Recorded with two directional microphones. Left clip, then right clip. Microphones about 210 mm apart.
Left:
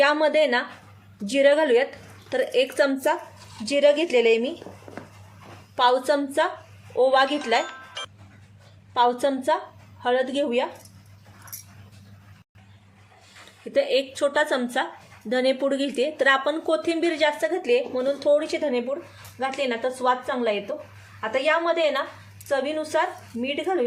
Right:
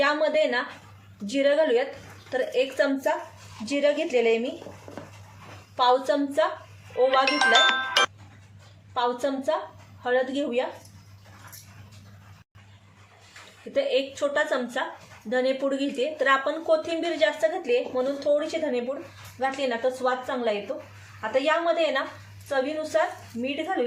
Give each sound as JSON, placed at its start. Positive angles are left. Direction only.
{"t": 0.0, "sound": "a woman's voice", "side_deg": 45}
{"t": 5.7, "sound": "a woman's voice", "side_deg": 45}
{"t": 7.3, "sound": "speech", "side_deg": -45}
{"t": 8.9, "sound": "a woman's voice", "side_deg": 45}
{"t": 13.7, "sound": "a woman's voice", "side_deg": 45}